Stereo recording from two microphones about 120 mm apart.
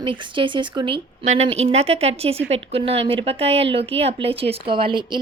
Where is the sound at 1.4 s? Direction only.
60° right (ahead or behind).